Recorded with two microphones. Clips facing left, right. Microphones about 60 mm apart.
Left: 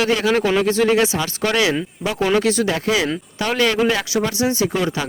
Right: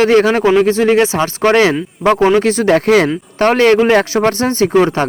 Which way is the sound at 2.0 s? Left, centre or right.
Right.